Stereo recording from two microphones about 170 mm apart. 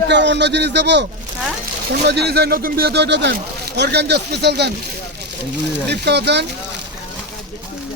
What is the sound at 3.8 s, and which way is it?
Speech, 75° right (ahead or behind).